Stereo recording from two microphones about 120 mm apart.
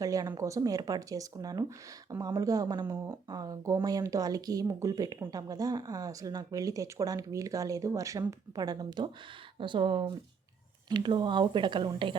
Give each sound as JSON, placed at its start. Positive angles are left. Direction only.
{"t": 0.0, "sound": "speech", "side_deg": -30}
{"t": 2.8, "sound": "speech", "side_deg": -20}
{"t": 3.2, "sound": "speech", "side_deg": -35}